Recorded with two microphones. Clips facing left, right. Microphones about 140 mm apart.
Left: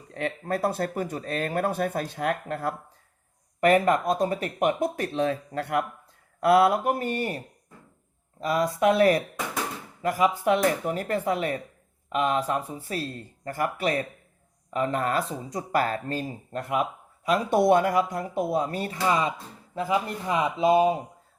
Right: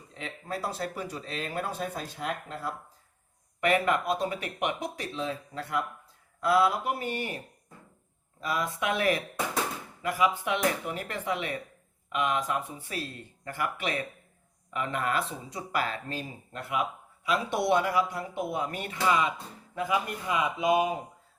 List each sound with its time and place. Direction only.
0.1 s speech: 55° left (ahead or behind)
3.6 s speech: 40° left (ahead or behind)
8.4 s speech: 40° left (ahead or behind)